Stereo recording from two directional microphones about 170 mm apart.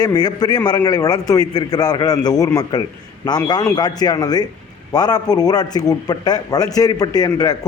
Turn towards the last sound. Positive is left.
turn(degrees=25)  # may be behind; listen again after turning